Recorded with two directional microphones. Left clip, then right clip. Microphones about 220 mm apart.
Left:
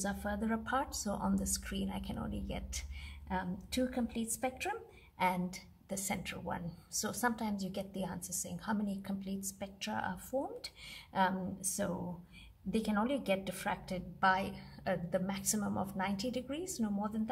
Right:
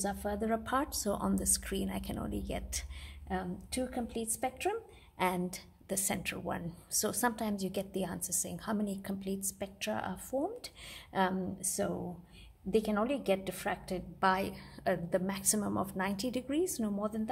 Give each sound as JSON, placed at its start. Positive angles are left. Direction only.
{"t": 0.0, "sound": "a woman's voice", "side_deg": -30}